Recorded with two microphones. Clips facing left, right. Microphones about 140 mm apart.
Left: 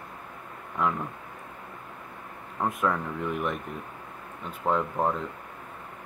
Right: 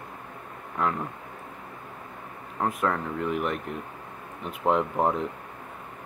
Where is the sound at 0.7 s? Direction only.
Centre (ahead or behind).